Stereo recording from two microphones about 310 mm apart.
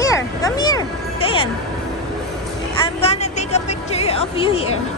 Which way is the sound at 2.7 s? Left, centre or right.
Centre.